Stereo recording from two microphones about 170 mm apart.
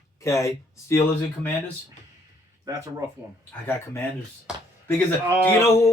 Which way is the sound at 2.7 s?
20° right (ahead or behind).